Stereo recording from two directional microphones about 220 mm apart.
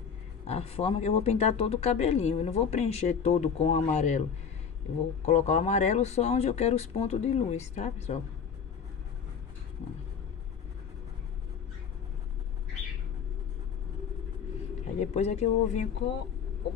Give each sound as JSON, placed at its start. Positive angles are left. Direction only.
{"t": 0.5, "sound": "speech", "side_deg": 25}
{"t": 5.2, "sound": "speech", "side_deg": 30}
{"t": 15.0, "sound": "speech", "side_deg": 30}